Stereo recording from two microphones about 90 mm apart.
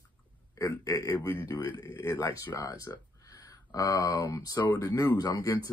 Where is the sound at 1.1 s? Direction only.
25° left (ahead or behind).